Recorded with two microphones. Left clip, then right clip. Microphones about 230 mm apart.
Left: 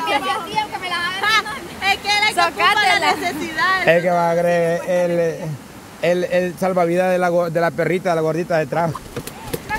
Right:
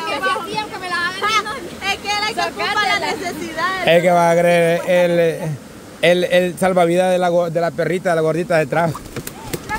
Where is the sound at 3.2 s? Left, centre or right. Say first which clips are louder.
Left 3 dB; left.